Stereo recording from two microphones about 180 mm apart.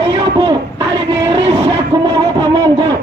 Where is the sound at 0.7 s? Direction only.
20° right (ahead or behind).